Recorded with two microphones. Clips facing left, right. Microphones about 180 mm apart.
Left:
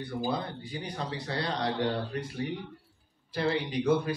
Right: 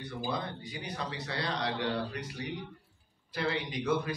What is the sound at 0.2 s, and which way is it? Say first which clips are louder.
Speech: left 3 dB; 30° left (ahead or behind).